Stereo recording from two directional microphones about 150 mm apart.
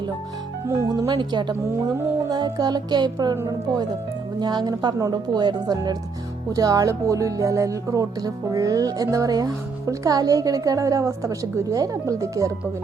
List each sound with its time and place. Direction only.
0.7 s speech: 20° right (ahead or behind)
4.4 s speech: 30° right (ahead or behind)